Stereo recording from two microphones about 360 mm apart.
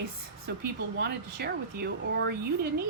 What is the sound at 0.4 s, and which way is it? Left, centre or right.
A woman's voice, right.